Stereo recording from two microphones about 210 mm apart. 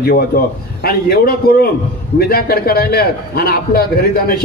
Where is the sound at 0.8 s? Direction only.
45° left (ahead or behind).